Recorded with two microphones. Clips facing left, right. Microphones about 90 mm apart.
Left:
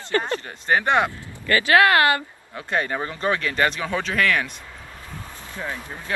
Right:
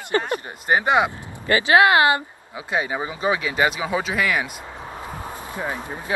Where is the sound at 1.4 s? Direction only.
20° right (ahead or behind).